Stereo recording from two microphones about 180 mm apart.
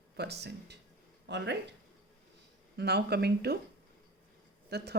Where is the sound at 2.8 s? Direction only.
65° right (ahead or behind).